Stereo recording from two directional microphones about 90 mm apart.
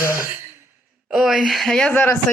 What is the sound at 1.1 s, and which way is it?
Speech, 5° right (ahead or behind).